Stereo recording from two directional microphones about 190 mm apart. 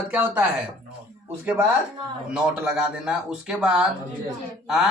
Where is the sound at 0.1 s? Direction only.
10° right (ahead or behind).